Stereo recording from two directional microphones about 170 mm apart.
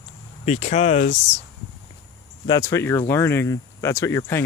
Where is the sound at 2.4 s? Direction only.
20° left (ahead or behind).